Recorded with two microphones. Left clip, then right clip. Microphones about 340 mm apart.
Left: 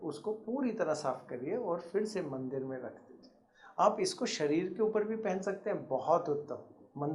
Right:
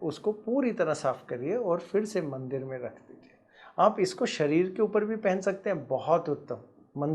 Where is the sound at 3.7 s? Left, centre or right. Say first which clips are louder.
Right 5 dB; right.